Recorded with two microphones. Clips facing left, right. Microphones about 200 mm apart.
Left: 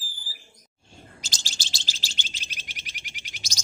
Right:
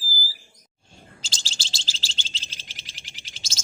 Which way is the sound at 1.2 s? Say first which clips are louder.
Even; 15° left (ahead or behind).